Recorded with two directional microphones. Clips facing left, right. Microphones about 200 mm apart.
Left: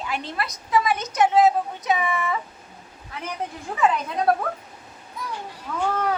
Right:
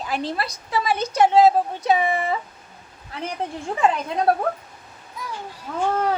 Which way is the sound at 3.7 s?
30° right (ahead or behind).